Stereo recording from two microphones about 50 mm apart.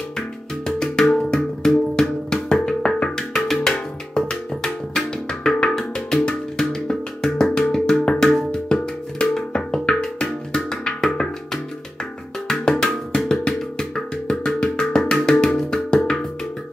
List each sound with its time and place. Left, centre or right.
0.7 s music: centre
12.4 s music: centre